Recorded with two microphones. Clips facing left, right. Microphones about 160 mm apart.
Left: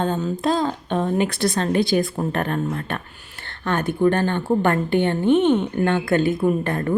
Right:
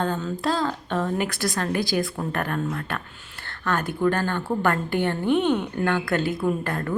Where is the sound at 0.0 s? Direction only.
20° left (ahead or behind).